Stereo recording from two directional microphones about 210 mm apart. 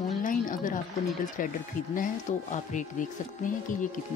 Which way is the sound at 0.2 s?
40° left (ahead or behind).